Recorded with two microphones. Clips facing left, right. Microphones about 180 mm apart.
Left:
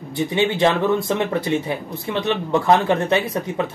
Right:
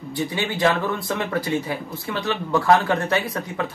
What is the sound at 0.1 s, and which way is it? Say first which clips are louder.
A man's voice: left 6 dB; 20° left (ahead or behind).